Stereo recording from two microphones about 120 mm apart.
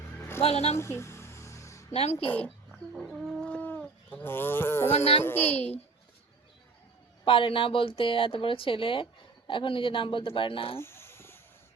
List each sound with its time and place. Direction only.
0.2 s music: 20° left (ahead or behind)
0.4 s speech: 60° left (ahead or behind)
0.8 s music: 25° left (ahead or behind)
1.9 s a woman's voice: 60° left (ahead or behind)
2.7 s bird: 5° right (ahead or behind); by 4.9 s 20° left (ahead or behind)
4.9 s speech: 60° left (ahead or behind)
5.2 s a child's voice: 15° left (ahead or behind)
5.5 s speech: 60° left (ahead or behind)
7.3 s speech: 45° left (ahead or behind)
10.8 s a sound: 20° left (ahead or behind)